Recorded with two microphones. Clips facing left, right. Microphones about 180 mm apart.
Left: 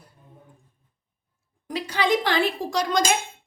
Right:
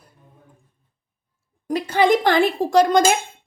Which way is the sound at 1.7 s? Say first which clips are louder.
Right 6 dB; 50° right (ahead or behind).